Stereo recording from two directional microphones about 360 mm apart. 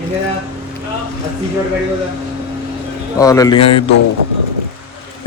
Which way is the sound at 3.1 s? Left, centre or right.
Centre.